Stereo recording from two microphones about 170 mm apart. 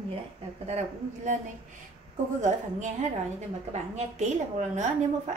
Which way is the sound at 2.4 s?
45° right (ahead or behind).